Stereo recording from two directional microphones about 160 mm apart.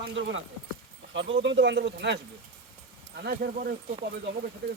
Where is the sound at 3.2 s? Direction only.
70° right (ahead or behind).